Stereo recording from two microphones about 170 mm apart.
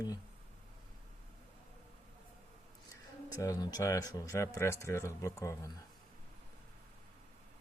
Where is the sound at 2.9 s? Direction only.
20° left (ahead or behind).